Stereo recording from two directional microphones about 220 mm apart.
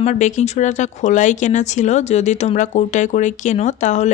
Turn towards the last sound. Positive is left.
turn(degrees=35)  # may be behind; listen again after turning